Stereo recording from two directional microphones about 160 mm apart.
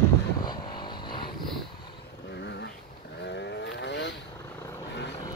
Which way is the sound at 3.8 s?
90° left.